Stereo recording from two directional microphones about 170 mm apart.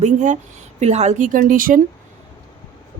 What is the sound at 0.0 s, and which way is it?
Speech, 45° right (ahead or behind).